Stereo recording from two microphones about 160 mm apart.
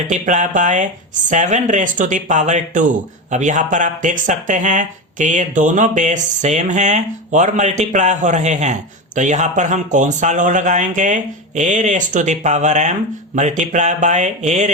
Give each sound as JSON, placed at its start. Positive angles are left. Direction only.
{"t": 0.1, "sound": "speech", "side_deg": -50}